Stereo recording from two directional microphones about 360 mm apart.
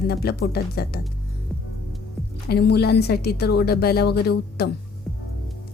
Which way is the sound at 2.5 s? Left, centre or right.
Left.